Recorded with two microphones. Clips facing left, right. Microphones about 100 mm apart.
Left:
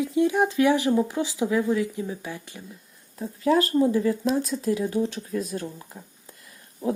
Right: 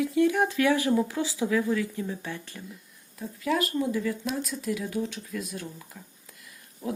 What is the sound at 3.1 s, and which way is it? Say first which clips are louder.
Speech: left 6 dB; 35° left (ahead or behind).